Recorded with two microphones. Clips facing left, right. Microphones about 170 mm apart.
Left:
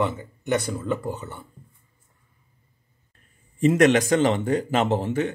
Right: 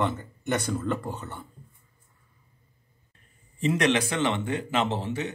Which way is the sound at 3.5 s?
50° left (ahead or behind).